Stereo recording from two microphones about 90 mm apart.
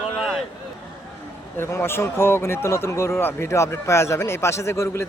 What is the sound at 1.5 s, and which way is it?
A man's voice, 25° left (ahead or behind).